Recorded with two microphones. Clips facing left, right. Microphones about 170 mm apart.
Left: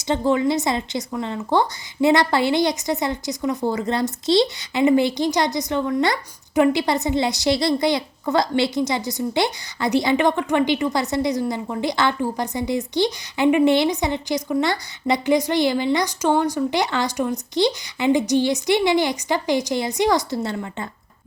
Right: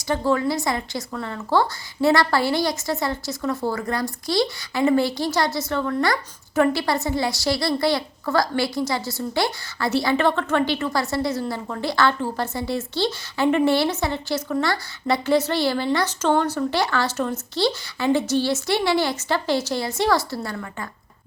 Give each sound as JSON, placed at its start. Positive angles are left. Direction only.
{"t": 0.0, "sound": "speech", "side_deg": 20}